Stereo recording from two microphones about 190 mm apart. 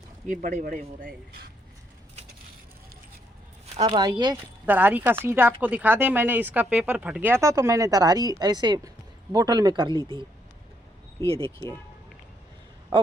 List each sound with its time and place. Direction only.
0.3 s speech: 45° right (ahead or behind)
3.8 s speech: 25° right (ahead or behind)
4.6 s speech: 10° right (ahead or behind); by 10.0 s 25° right (ahead or behind)
11.2 s speech: 15° left (ahead or behind)